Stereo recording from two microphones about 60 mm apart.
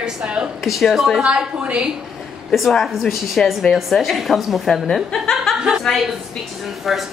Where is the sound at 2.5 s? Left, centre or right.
Centre.